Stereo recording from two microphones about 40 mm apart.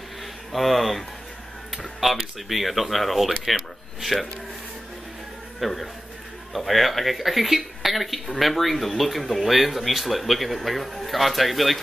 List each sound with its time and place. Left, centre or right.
0.5 s speech: centre
1.7 s a sound: centre
2.4 s speech: centre
5.6 s speech: centre